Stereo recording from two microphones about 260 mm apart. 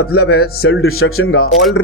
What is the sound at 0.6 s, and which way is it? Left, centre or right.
Speech, left.